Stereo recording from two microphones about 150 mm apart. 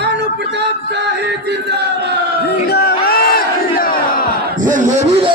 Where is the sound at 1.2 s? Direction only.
90° right.